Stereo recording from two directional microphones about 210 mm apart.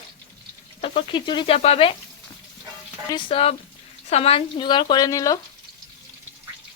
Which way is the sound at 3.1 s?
25° left (ahead or behind).